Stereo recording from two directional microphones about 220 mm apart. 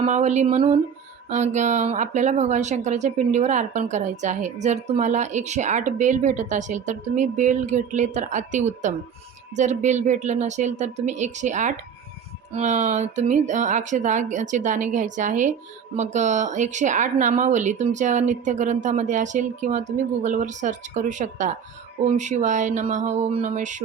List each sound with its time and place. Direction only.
0.0 s speech: 30° right (ahead or behind)